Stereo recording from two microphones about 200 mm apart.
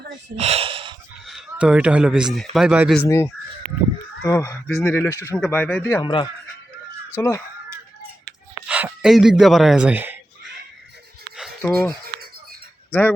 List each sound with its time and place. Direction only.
0.3 s a sound: 30° right (ahead or behind)
1.3 s speech: 5° right (ahead or behind)
3.0 s speech: 10° left (ahead or behind)
7.2 s speech: 15° left (ahead or behind)
8.6 s a man's voice: 5° right (ahead or behind)
11.3 s a sound: centre (ahead or behind)
12.9 s speech: 10° left (ahead or behind)